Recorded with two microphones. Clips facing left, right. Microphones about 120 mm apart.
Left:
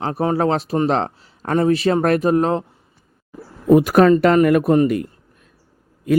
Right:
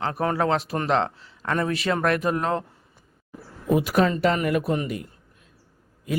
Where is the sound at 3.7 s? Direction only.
50° left (ahead or behind).